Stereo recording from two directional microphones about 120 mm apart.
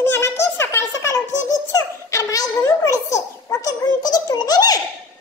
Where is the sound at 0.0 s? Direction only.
20° left (ahead or behind).